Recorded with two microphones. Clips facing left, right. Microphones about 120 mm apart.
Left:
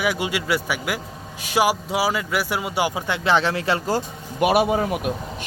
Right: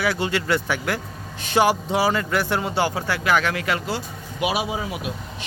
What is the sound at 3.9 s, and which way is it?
Speech, 50° left (ahead or behind).